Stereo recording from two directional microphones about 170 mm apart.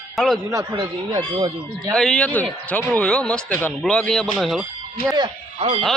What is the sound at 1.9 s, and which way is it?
Speech, 5° left (ahead or behind).